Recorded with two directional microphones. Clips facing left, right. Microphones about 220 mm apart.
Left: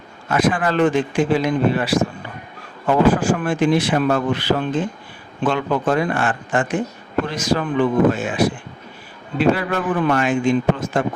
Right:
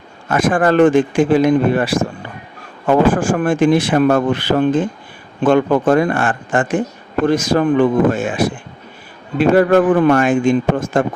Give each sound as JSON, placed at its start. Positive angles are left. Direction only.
{"t": 0.3, "sound": "speech", "side_deg": -50}